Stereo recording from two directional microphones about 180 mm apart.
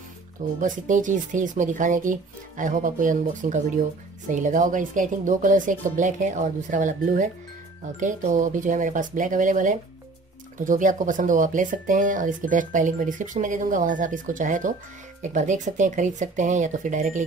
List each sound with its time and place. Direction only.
0.6 s speech: 45° right (ahead or behind)